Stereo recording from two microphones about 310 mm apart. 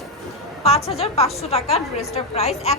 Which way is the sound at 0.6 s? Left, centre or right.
Centre.